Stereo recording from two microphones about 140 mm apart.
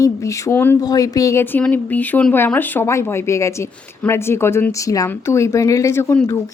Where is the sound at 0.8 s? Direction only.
25° left (ahead or behind).